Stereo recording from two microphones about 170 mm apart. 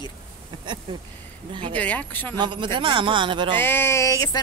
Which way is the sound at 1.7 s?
10° left (ahead or behind).